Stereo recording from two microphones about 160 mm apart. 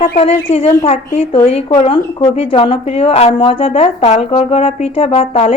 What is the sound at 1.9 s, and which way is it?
Speech, 30° left (ahead or behind).